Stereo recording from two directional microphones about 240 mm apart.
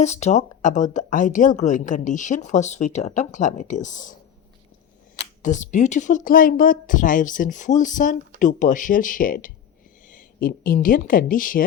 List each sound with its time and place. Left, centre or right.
0.0 s speech: left
5.1 s speech: left